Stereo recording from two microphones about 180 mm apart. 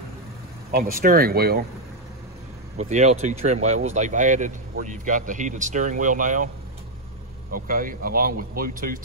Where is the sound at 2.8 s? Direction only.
40° right (ahead or behind).